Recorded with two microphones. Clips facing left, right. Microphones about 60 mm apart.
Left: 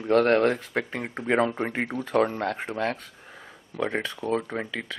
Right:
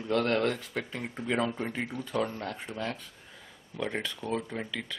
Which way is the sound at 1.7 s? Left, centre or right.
Left.